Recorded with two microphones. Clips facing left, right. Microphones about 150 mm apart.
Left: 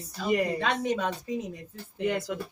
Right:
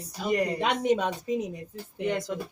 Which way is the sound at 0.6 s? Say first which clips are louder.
Right 3 dB; 20° right (ahead or behind).